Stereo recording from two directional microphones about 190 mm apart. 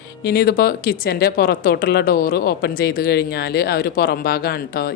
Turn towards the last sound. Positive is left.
turn(degrees=55)  # may be behind; listen again after turning